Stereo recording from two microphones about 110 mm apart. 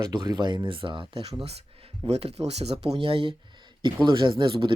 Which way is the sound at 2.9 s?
55° right (ahead or behind).